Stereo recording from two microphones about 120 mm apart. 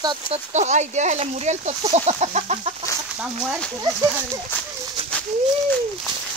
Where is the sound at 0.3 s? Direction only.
75° right (ahead or behind); by 2.7 s 60° right (ahead or behind).